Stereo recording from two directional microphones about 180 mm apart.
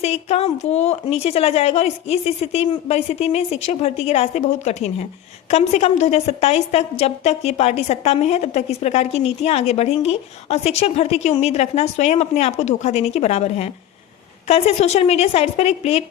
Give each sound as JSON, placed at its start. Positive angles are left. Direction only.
{"t": 0.0, "sound": "a woman's voice", "side_deg": 35}